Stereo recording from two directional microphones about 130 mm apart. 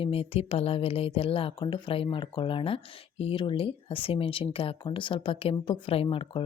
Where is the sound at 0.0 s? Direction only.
45° left (ahead or behind).